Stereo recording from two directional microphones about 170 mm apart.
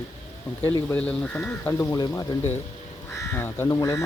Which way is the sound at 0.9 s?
5° left (ahead or behind).